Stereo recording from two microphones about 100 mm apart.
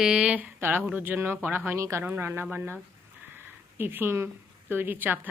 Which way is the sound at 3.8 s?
20° right (ahead or behind).